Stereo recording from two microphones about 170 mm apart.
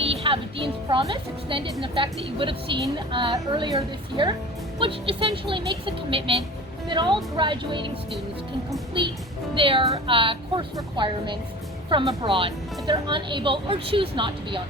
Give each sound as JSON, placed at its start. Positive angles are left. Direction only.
{"t": 0.0, "sound": "a woman's voice", "side_deg": -35}
{"t": 4.8, "sound": "a woman's voice", "side_deg": -35}
{"t": 9.6, "sound": "a woman's voice", "side_deg": -30}